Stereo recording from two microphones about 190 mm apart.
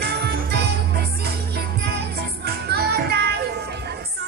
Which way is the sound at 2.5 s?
55° right (ahead or behind).